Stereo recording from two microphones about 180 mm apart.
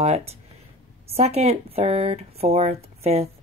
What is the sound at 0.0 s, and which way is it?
A woman's voice, 35° right (ahead or behind).